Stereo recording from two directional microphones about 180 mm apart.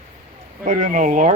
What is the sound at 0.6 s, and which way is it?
Speech, 45° right (ahead or behind).